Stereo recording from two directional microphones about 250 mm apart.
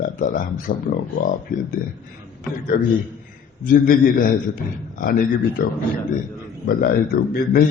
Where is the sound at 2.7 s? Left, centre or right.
Left.